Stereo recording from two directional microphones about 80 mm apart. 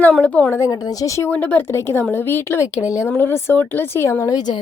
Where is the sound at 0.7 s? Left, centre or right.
Left.